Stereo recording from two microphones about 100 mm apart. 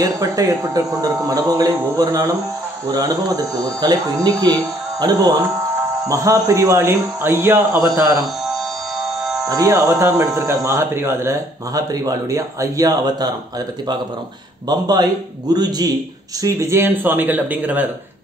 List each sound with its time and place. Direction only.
0.0 s speech: 35° right (ahead or behind)
2.0 s speech: 25° right (ahead or behind)
6.0 s speech: 30° right (ahead or behind)
9.4 s speech: 30° right (ahead or behind)
14.7 s speech: 40° right (ahead or behind); by 17.8 s 15° right (ahead or behind)